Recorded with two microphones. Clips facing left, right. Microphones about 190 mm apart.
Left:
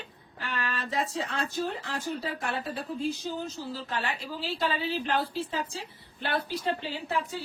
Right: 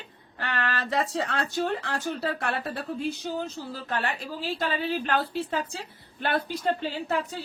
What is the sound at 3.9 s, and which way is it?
A woman's voice, 50° right (ahead or behind).